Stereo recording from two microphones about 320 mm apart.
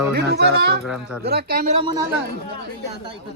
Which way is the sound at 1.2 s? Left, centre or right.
Right.